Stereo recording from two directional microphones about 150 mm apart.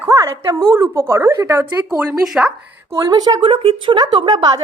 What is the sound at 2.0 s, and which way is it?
Speech, 5° right (ahead or behind).